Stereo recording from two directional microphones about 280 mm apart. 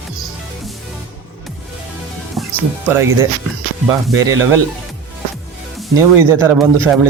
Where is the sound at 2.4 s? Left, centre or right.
Centre.